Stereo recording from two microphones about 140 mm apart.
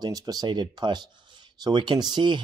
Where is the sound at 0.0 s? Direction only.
30° right (ahead or behind).